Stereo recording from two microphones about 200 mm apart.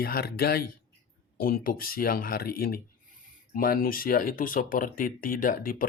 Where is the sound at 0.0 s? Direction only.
50° left (ahead or behind).